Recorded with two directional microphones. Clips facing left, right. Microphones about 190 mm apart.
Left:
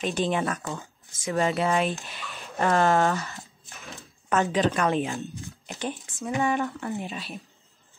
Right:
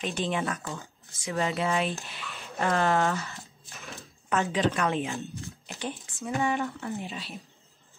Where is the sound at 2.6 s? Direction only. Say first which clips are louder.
Left 3 dB; 50° left (ahead or behind).